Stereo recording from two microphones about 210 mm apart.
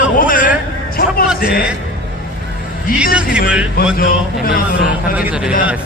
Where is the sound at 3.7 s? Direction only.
45° left (ahead or behind).